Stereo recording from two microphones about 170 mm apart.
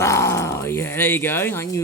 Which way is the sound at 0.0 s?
15° left (ahead or behind).